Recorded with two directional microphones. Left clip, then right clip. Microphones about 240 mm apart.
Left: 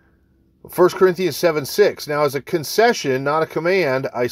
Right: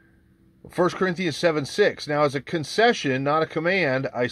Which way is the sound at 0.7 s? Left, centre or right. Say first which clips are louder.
Left 8 dB; left.